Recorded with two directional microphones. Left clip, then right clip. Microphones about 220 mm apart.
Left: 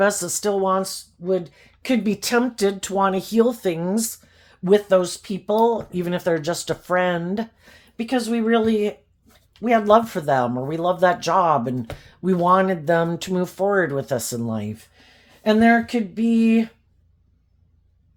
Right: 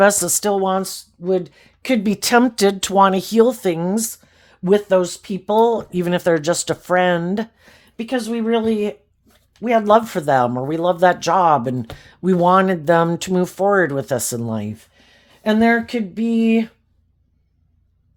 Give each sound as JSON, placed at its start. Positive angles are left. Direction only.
{"t": 0.0, "sound": "speech", "side_deg": -35}